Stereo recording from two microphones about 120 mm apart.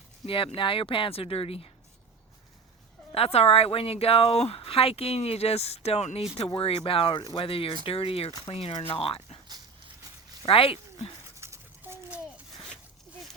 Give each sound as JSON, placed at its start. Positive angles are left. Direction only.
{"t": 0.3, "sound": "speech", "side_deg": 50}
{"t": 3.2, "sound": "speech", "side_deg": 55}
{"t": 6.6, "sound": "speech", "side_deg": 50}
{"t": 10.4, "sound": "speech", "side_deg": 50}
{"t": 11.3, "sound": "a sound", "side_deg": -20}